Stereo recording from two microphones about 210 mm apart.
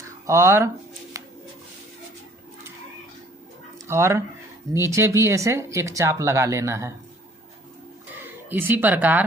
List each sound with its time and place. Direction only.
0.3 s speech: 15° right (ahead or behind)
1.2 s a sound: 15° right (ahead or behind)
3.8 s speech: 15° right (ahead or behind)
8.2 s speech: 10° right (ahead or behind)